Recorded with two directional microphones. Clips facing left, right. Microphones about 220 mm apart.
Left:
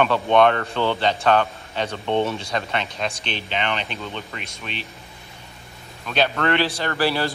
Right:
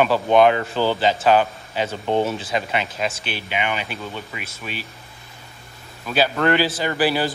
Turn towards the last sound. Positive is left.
turn(degrees=-5)  # may be behind; listen again after turning